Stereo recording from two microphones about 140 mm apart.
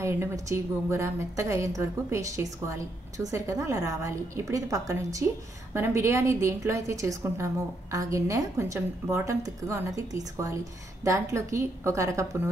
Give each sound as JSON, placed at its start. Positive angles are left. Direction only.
{"t": 0.0, "sound": "a woman's voice", "side_deg": -20}